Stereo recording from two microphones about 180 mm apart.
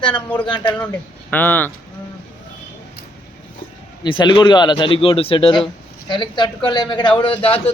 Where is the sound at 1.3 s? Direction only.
10° left (ahead or behind).